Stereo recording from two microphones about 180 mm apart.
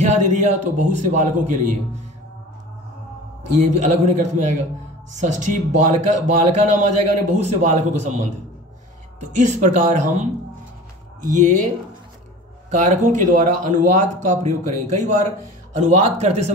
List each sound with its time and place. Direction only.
0.0 s a man's voice: 40° right (ahead or behind)
3.5 s a man's voice: 40° right (ahead or behind)
9.3 s a man's voice: 45° right (ahead or behind)
12.6 s a man's voice: 45° right (ahead or behind)